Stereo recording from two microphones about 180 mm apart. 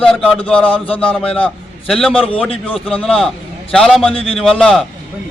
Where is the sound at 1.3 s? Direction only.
5° left (ahead or behind).